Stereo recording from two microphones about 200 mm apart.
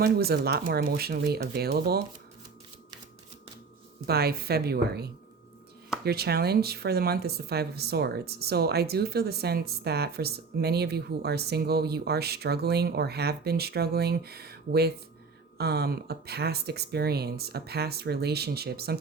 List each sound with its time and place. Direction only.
0.0 s speech: 50° right (ahead or behind)
4.0 s speech: 50° right (ahead or behind)
6.1 s speech: 50° right (ahead or behind)